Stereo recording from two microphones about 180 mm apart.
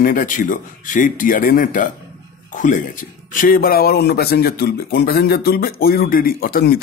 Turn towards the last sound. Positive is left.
turn(degrees=60)  # may be behind; listen again after turning